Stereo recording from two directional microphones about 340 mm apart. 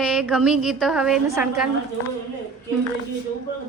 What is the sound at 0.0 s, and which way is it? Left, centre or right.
A woman's voice, centre.